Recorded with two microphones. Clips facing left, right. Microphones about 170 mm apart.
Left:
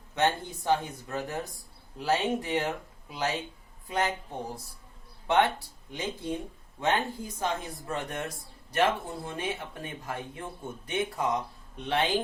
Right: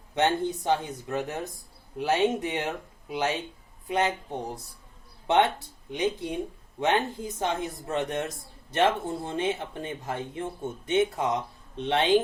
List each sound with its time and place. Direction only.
0.1 s speech: 20° right (ahead or behind)
5.3 s speech: 20° right (ahead or behind)